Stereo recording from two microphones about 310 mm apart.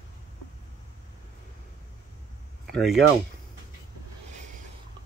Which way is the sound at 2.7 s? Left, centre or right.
Centre.